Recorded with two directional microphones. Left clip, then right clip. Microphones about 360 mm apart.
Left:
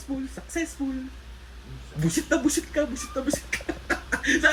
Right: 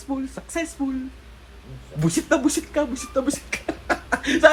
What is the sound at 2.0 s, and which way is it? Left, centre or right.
Speech, right.